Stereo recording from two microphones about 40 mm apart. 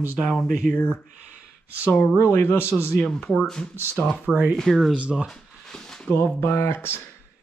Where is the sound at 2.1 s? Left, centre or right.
Left.